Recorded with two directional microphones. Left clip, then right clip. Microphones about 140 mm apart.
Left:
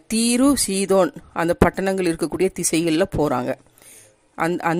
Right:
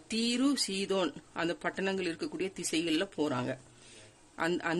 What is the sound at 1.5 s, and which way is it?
A woman's voice, 45° left (ahead or behind).